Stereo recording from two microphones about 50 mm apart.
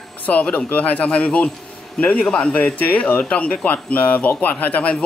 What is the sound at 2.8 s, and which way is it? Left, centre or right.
Speech, left.